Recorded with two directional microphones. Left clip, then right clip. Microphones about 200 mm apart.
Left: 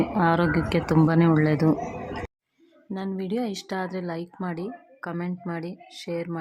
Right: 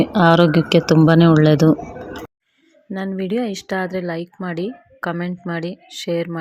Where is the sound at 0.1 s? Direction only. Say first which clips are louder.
Right 9 dB; 25° right (ahead or behind).